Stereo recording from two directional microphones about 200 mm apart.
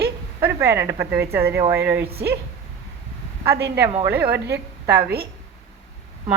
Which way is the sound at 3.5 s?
60° right (ahead or behind).